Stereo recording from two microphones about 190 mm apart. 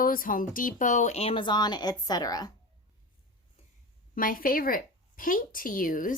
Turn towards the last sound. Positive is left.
turn(degrees=45)  # may be behind; listen again after turning